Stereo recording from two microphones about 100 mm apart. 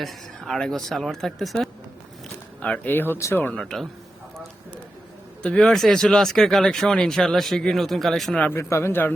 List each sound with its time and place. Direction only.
0.0 s speech: centre (ahead or behind); by 3.4 s 25° left (ahead or behind)
3.6 s speech: 5° left (ahead or behind)
5.4 s speech: 10° left (ahead or behind)
8.4 s speech: 25° left (ahead or behind)